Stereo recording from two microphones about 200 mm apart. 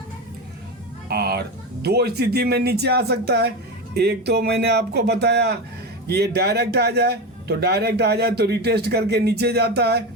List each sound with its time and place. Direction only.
1.0 s speech: 55° right (ahead or behind)